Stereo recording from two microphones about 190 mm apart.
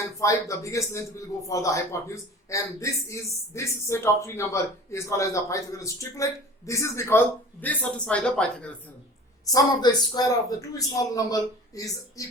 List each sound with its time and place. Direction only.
0.2 s a man's voice: 15° left (ahead or behind)
9.5 s a man's voice: 20° left (ahead or behind)